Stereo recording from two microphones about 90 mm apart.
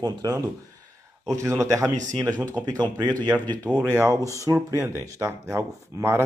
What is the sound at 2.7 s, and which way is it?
Speech, 50° right (ahead or behind).